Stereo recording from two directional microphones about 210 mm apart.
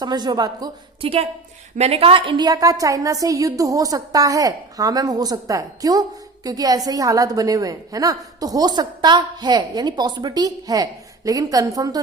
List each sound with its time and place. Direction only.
0.0 s a woman's voice: 20° right (ahead or behind)